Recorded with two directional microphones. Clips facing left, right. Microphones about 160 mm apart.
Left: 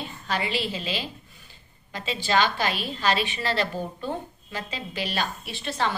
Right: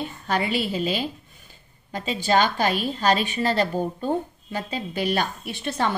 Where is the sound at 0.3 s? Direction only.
50° right (ahead or behind).